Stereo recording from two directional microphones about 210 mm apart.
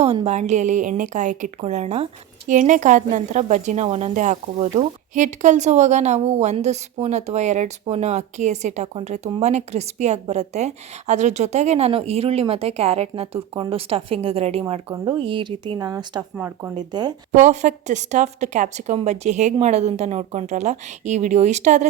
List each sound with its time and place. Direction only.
0.0 s a woman's voice: 30° right (ahead or behind)
17.3 s a woman's voice: 35° right (ahead or behind)